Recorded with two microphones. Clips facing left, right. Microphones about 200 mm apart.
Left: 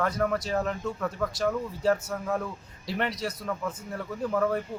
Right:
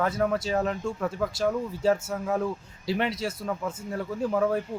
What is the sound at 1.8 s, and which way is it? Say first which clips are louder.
Speech: right 1 dB; 25° right (ahead or behind).